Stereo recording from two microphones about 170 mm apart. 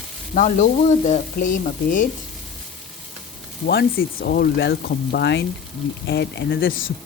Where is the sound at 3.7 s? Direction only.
70° left (ahead or behind); by 5.5 s 85° left.